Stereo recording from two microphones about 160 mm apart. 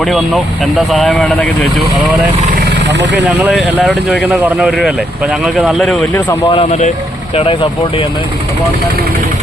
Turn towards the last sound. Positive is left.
turn(degrees=35)  # may be behind; listen again after turning